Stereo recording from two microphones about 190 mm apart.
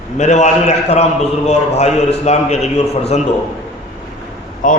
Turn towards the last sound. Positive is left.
turn(degrees=45)  # may be behind; listen again after turning